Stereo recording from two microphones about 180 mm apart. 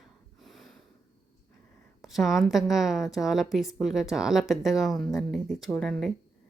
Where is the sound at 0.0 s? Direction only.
Centre (ahead or behind).